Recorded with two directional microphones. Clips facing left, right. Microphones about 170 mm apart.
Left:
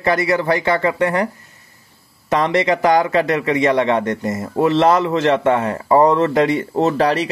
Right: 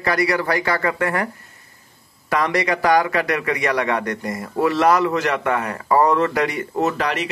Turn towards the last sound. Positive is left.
turn(degrees=35)  # may be behind; listen again after turning